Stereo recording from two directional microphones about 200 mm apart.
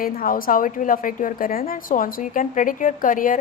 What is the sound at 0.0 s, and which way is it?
A woman's voice, 45° left (ahead or behind).